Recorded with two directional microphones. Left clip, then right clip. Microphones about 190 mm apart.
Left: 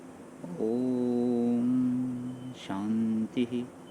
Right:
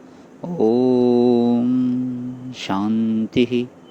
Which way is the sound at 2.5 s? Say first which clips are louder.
Right 12 dB; 25° right (ahead or behind).